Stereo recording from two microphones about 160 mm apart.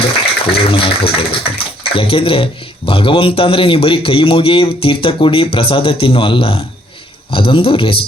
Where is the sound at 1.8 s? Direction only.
35° left (ahead or behind).